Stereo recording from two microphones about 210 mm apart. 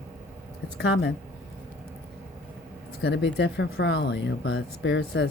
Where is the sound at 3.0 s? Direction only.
55° left (ahead or behind).